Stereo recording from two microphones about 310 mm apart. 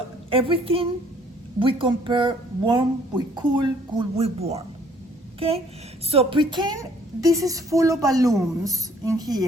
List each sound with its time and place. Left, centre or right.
0.3 s speech: centre